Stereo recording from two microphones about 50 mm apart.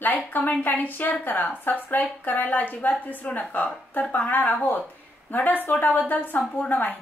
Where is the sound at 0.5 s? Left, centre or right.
Left.